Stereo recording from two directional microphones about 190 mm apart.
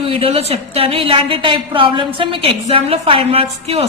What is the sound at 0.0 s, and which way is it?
A woman's voice, 30° right (ahead or behind).